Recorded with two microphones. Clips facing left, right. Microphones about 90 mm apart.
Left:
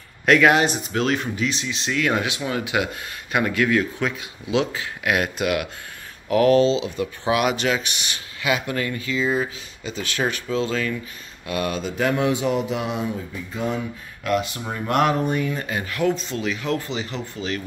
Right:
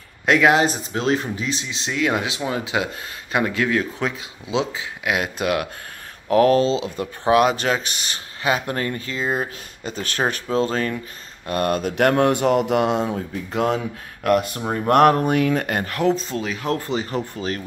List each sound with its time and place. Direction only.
0.2 s speech: 20° right (ahead or behind); by 13.7 s 75° right (ahead or behind)
14.2 s speech: 50° right (ahead or behind); by 15.8 s 80° right
15.8 s speech: 40° right (ahead or behind)